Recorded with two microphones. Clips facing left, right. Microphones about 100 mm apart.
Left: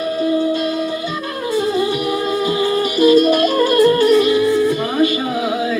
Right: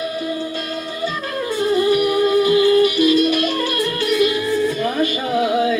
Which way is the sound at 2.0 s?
25° left (ahead or behind).